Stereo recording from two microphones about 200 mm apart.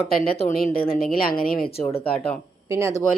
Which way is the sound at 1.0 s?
45° left (ahead or behind).